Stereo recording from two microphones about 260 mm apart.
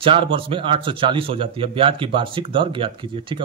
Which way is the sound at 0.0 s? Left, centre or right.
Centre.